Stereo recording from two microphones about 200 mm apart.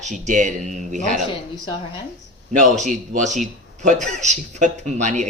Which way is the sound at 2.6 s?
40° right (ahead or behind).